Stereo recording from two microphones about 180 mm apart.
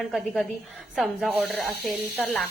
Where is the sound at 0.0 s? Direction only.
Centre (ahead or behind).